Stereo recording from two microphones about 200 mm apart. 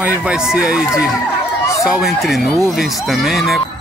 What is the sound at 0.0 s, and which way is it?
Speech, 5° right (ahead or behind).